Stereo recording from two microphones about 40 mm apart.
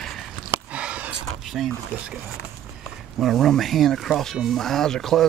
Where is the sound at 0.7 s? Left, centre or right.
Right.